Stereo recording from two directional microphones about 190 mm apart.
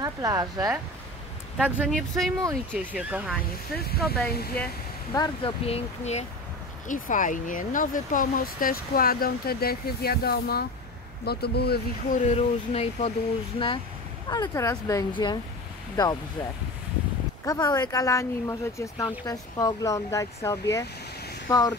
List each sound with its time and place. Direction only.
0.0 s speech: 20° right (ahead or behind)
1.9 s speech: centre (ahead or behind)
3.9 s speech: 55° left (ahead or behind)
5.1 s speech: 25° left (ahead or behind); by 12.2 s 55° left (ahead or behind)
12.2 s speech: 35° left (ahead or behind)
14.3 s speech: 20° left (ahead or behind)
17.5 s speech: 20° left (ahead or behind)